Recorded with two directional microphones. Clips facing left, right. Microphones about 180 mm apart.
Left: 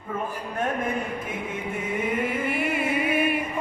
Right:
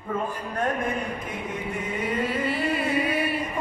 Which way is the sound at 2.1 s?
20° left (ahead or behind).